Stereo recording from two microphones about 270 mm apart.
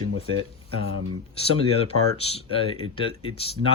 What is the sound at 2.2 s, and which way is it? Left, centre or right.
Speech, left.